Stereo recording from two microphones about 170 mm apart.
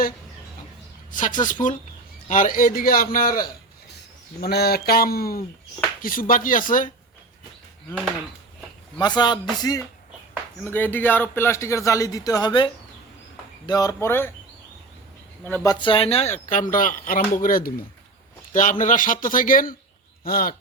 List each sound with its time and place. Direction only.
1.1 s a man's voice: 50° left (ahead or behind)
9.0 s speech: 25° left (ahead or behind)
10.6 s speech: 10° left (ahead or behind)
15.6 s a man's voice: 25° left (ahead or behind); by 20.6 s 60° left (ahead or behind)